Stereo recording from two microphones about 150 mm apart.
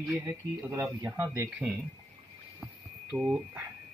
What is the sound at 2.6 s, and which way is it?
Hum, 5° right (ahead or behind).